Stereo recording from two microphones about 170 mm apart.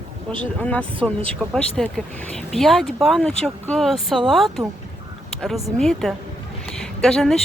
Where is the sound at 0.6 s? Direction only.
10° left (ahead or behind).